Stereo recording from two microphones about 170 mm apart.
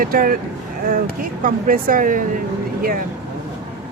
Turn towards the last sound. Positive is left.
turn(degrees=-55)  # may be behind; listen again after turning